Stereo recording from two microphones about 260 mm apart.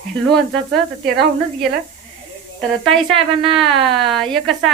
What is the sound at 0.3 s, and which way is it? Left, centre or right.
Speech, centre.